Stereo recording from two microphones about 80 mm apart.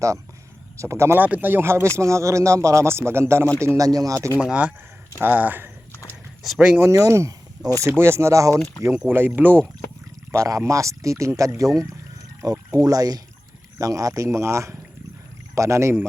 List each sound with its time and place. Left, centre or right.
0.8 s speech: right
3.8 s speech: right
5.1 s speech: right
6.4 s speech: centre
6.7 s speech: right
9.0 s speech: right
10.3 s speech: right